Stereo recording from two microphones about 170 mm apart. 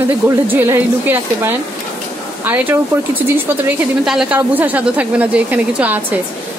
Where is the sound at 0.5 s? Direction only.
10° right (ahead or behind).